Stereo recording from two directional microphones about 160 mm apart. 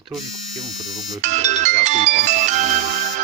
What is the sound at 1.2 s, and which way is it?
Music, 45° right (ahead or behind).